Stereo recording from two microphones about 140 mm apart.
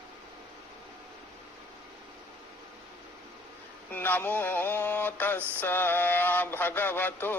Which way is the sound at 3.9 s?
15° left (ahead or behind).